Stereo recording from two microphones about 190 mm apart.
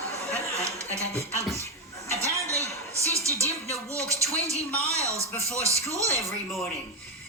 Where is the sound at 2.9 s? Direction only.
15° right (ahead or behind).